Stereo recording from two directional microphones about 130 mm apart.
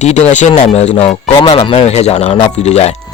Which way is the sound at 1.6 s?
55° left (ahead or behind).